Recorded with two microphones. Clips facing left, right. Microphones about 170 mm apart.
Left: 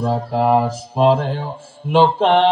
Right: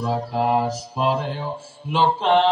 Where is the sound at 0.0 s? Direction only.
50° left (ahead or behind).